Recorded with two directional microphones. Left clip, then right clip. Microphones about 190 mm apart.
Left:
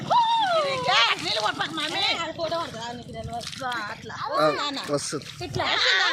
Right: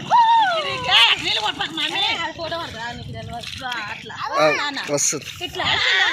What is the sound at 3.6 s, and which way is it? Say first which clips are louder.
Speech: right 3 dB; 35° left (ahead or behind).